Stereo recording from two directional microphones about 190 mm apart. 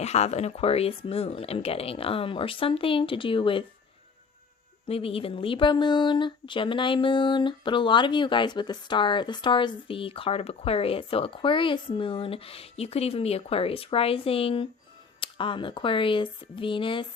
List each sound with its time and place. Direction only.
0.0 s speech: 35° left (ahead or behind)
4.9 s speech: 30° left (ahead or behind)